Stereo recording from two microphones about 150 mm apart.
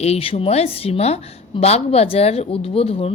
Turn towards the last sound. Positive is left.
turn(degrees=40)  # may be behind; listen again after turning